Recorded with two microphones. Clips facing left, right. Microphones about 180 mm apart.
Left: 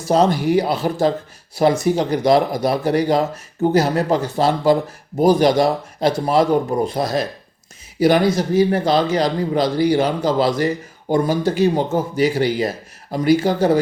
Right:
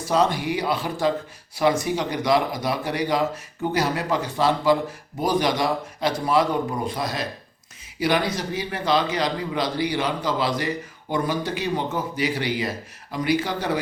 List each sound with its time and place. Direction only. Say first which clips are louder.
0.1 s speech: left 6 dB; 40° left (ahead or behind)